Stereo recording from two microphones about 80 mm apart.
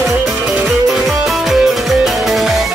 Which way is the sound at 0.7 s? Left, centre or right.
Centre.